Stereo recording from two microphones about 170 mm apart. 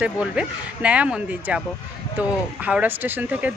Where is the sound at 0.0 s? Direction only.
5° right (ahead or behind).